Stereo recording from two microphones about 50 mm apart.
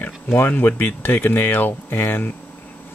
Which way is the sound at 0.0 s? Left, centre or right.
Left.